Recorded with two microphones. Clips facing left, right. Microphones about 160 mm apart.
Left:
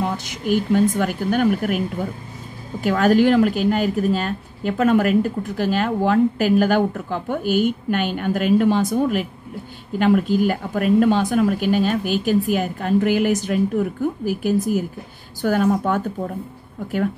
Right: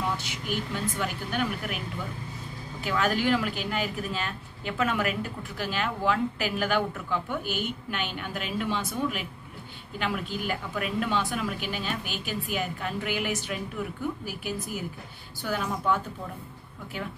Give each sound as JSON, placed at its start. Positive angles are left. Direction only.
{"t": 0.0, "sound": "a woman's voice", "side_deg": 45}